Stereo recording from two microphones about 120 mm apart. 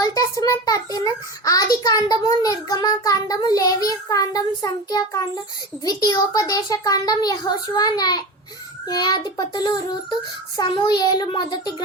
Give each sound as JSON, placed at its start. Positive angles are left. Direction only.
{"t": 0.0, "sound": "a child's voice", "side_deg": 30}